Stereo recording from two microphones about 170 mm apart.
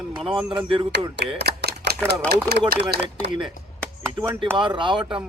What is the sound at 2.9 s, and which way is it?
Speech, 90° right.